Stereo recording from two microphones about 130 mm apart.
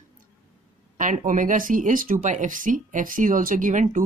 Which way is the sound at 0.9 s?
85° right.